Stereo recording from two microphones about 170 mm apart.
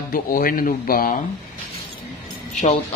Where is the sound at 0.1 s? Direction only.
55° left (ahead or behind).